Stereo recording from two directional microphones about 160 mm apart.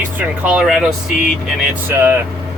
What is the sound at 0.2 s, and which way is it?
Speech, 5° right (ahead or behind).